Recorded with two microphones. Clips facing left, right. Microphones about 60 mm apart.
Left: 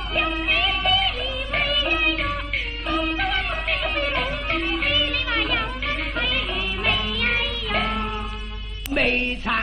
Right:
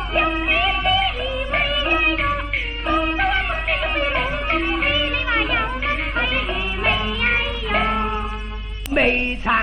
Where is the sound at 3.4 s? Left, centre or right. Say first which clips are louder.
Right 3 dB; centre.